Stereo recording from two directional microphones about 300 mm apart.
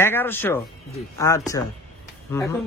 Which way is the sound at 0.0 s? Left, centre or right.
Centre.